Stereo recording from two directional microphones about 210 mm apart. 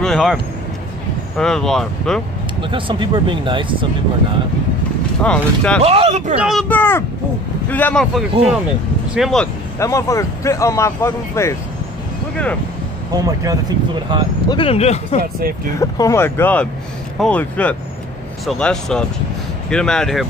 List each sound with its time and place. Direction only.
0.0 s speech: centre (ahead or behind)
1.4 s a man's voice: centre (ahead or behind)
2.6 s speech: 25° right (ahead or behind)
5.2 s a man's voice: 5° left (ahead or behind)
5.9 s speech: 30° right (ahead or behind)
6.3 s a man's voice: 5° right (ahead or behind)
6.7 s a man's voice: 10° left (ahead or behind)
9.8 s speech: 15° left (ahead or behind)
13.1 s speech: 15° right (ahead or behind)
14.5 s speech: 25° left (ahead or behind)
15.8 s a man's voice: 15° left (ahead or behind)